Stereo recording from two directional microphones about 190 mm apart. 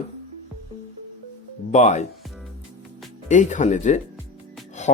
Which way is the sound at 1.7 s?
40° left (ahead or behind).